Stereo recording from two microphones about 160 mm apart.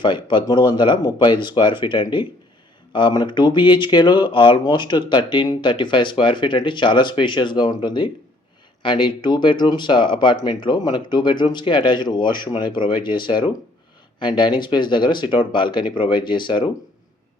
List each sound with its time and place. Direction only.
0.0 s speech: 30° left (ahead or behind)